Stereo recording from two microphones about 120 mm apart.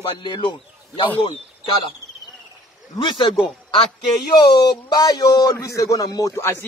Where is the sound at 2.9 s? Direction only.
40° left (ahead or behind).